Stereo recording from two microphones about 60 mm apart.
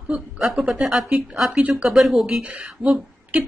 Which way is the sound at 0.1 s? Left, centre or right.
Centre.